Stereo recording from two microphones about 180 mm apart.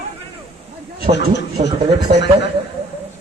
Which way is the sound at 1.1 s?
35° right (ahead or behind).